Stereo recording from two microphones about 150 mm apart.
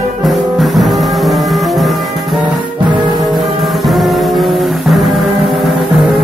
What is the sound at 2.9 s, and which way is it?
Music, 30° right (ahead or behind).